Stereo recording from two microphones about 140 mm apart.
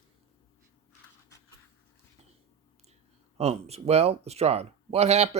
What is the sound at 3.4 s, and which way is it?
Speech, 50° right (ahead or behind).